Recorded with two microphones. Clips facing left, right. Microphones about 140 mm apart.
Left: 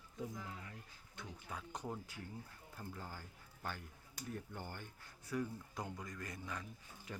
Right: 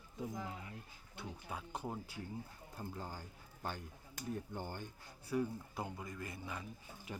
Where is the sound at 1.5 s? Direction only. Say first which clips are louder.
Right 2 dB; 10° right (ahead or behind).